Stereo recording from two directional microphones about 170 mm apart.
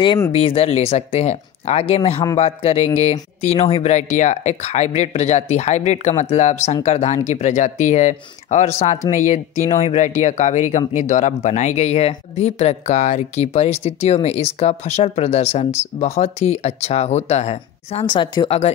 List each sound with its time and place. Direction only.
0.3 s speech: 35° left (ahead or behind)